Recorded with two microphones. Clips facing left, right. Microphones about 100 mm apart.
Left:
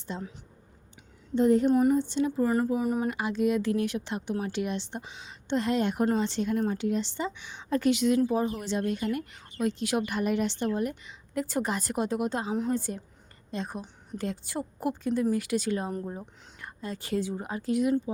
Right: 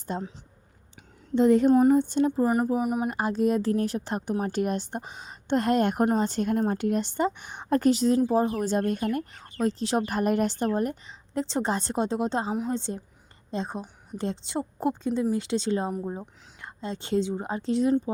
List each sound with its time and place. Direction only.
0.1 s speech: 50° right (ahead or behind)
1.4 s speech: 90° right
1.7 s speech: 40° right (ahead or behind)
2.4 s speech: 15° right (ahead or behind)
3.1 s a woman's voice: 40° right (ahead or behind)